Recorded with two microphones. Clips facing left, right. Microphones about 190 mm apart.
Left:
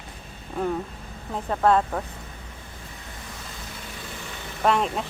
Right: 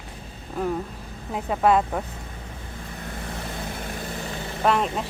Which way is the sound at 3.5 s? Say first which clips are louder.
Right 7 dB; 60° right (ahead or behind).